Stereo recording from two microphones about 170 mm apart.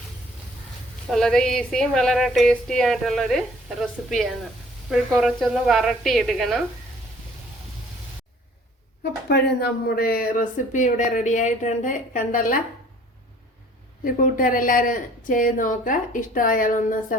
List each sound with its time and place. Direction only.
1.1 s speech: 5° left (ahead or behind)
9.3 s speech: 70° left (ahead or behind); by 12.5 s 55° left (ahead or behind)
14.0 s speech: 55° left (ahead or behind)